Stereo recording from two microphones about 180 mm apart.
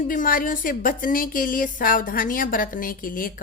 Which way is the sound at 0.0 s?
50° left (ahead or behind).